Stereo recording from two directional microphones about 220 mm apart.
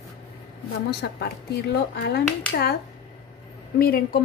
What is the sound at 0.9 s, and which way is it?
A woman's voice, 45° left (ahead or behind).